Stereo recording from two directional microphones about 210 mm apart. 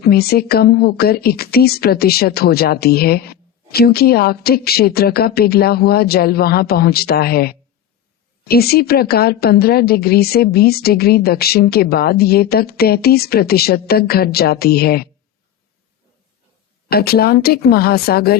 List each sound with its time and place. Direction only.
0.0 s speech: 45° left (ahead or behind)
16.9 s speech: 45° left (ahead or behind)